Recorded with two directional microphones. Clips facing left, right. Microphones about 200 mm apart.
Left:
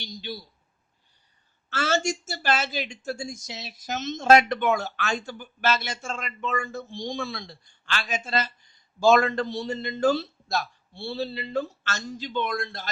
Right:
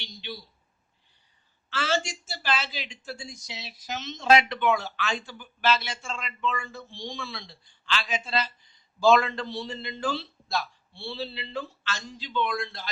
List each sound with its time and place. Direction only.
0.0 s speech: 40° left (ahead or behind)
1.7 s speech: 45° left (ahead or behind)